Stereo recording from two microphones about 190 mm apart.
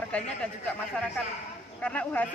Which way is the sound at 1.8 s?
5° left (ahead or behind).